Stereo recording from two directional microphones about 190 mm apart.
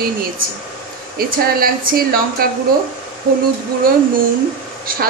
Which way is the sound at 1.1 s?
50° right (ahead or behind).